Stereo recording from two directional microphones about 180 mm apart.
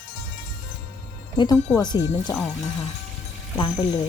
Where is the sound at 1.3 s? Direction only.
20° left (ahead or behind).